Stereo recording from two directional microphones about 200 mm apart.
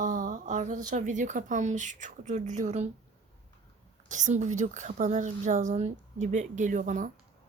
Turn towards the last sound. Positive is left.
turn(degrees=-40)  # may be behind; listen again after turning